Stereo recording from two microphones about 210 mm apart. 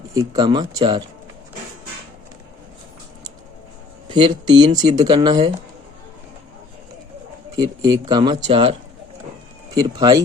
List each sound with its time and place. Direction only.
0.1 s speech: 20° right (ahead or behind)
4.1 s speech: 20° right (ahead or behind)
7.9 s speech: 20° right (ahead or behind)
9.7 s speech: 20° right (ahead or behind)